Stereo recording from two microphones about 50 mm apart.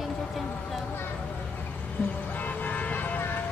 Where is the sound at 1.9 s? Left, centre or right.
Left.